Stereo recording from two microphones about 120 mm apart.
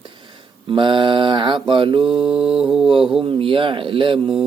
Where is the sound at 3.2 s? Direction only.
45° right (ahead or behind).